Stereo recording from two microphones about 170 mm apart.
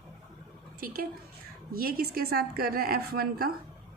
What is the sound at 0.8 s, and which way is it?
A woman's voice, 60° right (ahead or behind).